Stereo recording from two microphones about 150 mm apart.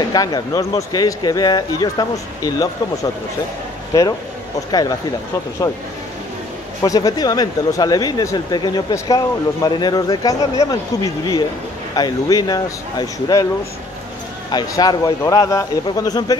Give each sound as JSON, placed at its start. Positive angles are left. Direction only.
{"t": 0.1, "sound": "speech", "side_deg": 25}
{"t": 6.8, "sound": "speech", "side_deg": 25}
{"t": 14.5, "sound": "speech", "side_deg": 30}